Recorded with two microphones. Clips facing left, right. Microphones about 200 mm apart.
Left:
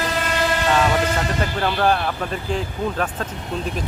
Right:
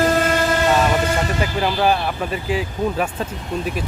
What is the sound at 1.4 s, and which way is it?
Speech, 5° right (ahead or behind).